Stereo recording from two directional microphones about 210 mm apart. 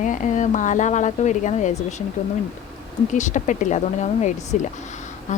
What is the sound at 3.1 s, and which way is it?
A woman's voice, 35° left (ahead or behind).